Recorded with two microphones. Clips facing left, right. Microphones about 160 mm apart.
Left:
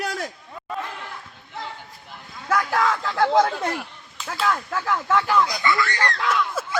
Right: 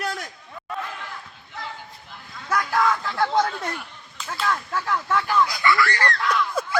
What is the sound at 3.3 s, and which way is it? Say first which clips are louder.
Speech: left 3 dB; 90° left.